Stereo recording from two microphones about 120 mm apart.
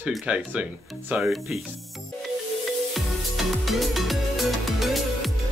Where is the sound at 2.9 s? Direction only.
Centre (ahead or behind).